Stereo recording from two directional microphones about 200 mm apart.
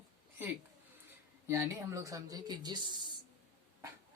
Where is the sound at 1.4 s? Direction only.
15° right (ahead or behind).